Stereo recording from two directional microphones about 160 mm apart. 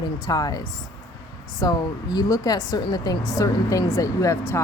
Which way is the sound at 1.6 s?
25° left (ahead or behind).